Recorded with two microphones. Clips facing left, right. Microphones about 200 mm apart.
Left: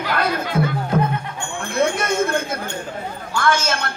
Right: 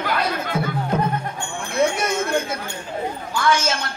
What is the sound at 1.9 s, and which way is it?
A man's voice, 55° left (ahead or behind).